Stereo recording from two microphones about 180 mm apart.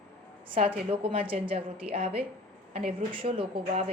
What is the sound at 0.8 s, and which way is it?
A woman's voice, 30° right (ahead or behind).